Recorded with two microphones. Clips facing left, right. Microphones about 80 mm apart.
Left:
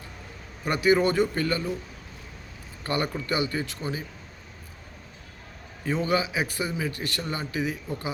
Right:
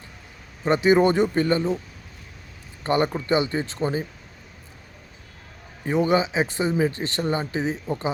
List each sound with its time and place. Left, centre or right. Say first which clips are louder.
0.6 s speech: right 4 dB; right
2.8 s speech: right 6 dB; right
5.8 s speech: right 5 dB; right